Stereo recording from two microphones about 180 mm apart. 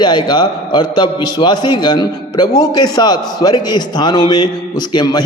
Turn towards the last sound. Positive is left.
turn(degrees=25)  # may be behind; listen again after turning